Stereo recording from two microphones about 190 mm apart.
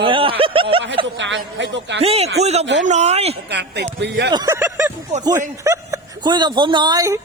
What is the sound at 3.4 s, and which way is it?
Speech, 60° right (ahead or behind).